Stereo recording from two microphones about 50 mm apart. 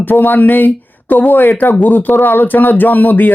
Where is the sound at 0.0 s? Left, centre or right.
Left.